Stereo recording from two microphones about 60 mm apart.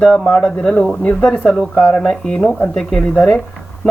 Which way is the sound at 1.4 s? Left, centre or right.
Centre.